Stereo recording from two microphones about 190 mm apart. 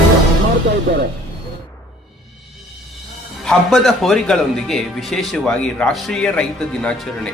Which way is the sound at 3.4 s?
Centre (ahead or behind).